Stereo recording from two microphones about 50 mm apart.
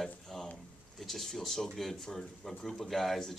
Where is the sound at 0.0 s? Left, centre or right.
Centre.